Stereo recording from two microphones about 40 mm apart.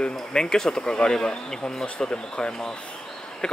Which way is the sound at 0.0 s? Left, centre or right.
Centre.